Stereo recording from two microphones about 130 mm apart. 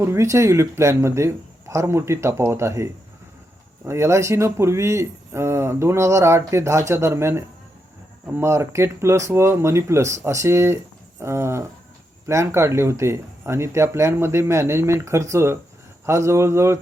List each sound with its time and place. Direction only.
0.0 s speech: 20° right (ahead or behind)